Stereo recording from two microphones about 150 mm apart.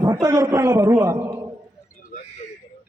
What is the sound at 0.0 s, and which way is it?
A man's voice, 20° right (ahead or behind).